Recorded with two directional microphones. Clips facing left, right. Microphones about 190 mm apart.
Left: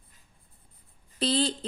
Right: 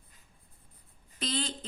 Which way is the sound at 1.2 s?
35° left (ahead or behind).